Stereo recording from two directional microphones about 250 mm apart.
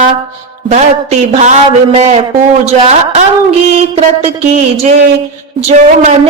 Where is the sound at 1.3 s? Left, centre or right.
Right.